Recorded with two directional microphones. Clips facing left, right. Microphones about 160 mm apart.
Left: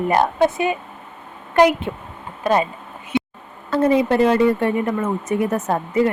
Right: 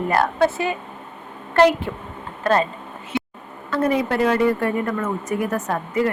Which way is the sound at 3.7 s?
25° left (ahead or behind).